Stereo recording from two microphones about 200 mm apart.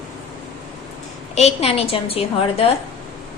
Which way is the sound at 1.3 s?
30° left (ahead or behind).